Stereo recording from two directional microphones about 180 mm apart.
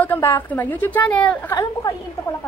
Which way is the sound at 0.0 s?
10° left (ahead or behind).